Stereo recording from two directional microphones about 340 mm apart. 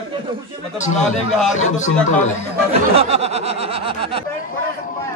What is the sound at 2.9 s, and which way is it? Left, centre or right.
Speech, centre.